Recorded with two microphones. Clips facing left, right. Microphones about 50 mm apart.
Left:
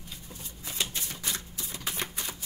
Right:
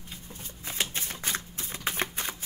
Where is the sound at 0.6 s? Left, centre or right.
Right.